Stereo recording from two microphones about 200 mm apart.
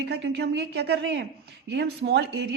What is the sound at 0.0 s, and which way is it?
Speech, 55° right (ahead or behind).